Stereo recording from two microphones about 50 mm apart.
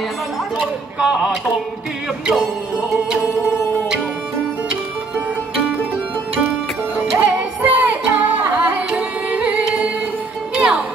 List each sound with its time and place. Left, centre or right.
0.9 s speech: centre
7.2 s music: right
8.9 s carnatic music: right
10.5 s music: centre